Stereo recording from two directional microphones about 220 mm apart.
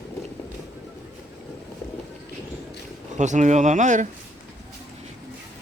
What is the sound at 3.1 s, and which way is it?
Speech, 35° right (ahead or behind).